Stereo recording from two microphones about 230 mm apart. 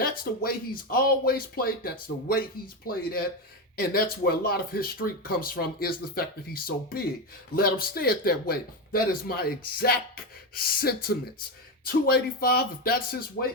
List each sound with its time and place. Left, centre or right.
0.0 s speech: left